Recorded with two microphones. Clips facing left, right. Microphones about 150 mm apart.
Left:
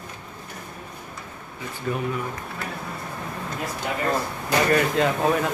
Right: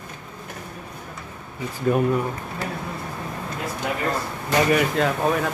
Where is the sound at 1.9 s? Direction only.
40° right (ahead or behind).